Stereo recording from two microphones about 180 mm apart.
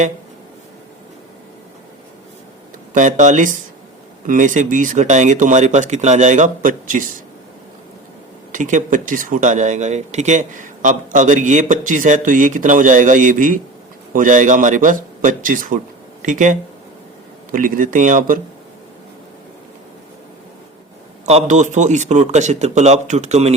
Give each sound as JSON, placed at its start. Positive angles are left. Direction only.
{"t": 2.9, "sound": "speech", "side_deg": -45}
{"t": 8.5, "sound": "speech", "side_deg": -45}
{"t": 21.2, "sound": "speech", "side_deg": -40}